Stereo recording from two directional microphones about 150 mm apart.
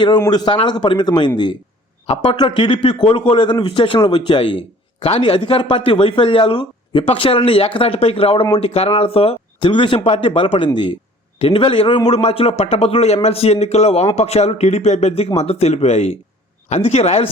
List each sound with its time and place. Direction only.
0.3 s speech: 30° left (ahead or behind); by 17.2 s 45° left (ahead or behind)